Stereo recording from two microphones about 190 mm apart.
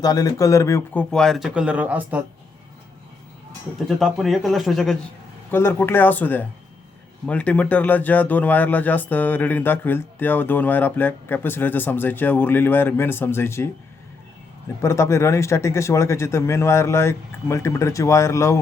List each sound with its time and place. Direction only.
0.0 s speech: 20° left (ahead or behind)
1.1 s speech: centre (ahead or behind)
3.8 s speech: centre (ahead or behind)
5.5 s speech: 10° left (ahead or behind)
14.8 s speech: 15° left (ahead or behind)